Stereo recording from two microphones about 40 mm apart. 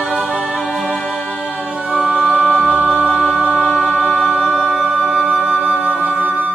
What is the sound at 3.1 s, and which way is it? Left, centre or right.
Choir, centre.